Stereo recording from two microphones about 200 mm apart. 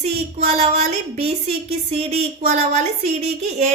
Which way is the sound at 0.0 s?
30° right (ahead or behind).